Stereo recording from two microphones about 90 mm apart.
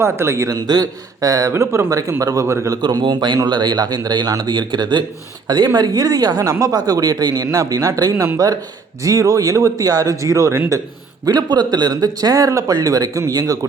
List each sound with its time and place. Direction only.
0.0 s speech: 30° right (ahead or behind)
2.8 s speech: 55° right (ahead or behind); by 10.6 s 35° right (ahead or behind)
11.3 s speech: 50° right (ahead or behind)